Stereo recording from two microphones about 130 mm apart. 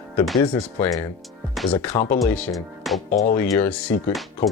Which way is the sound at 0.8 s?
25° left (ahead or behind).